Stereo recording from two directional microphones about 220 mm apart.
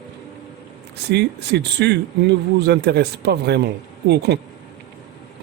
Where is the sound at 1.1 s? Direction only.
50° right (ahead or behind).